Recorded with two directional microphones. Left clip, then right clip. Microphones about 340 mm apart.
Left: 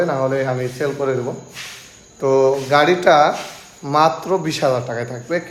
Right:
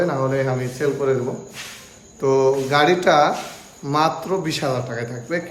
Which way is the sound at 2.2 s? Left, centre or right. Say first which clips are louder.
Left 2 dB; centre.